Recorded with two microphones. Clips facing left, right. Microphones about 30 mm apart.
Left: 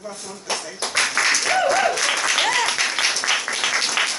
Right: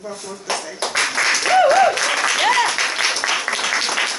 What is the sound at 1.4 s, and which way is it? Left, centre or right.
Applause, centre.